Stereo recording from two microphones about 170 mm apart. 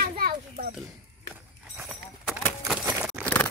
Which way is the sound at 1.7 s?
5° right (ahead or behind).